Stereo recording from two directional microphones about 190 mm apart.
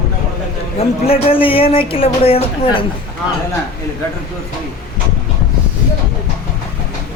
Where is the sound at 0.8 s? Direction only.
30° left (ahead or behind).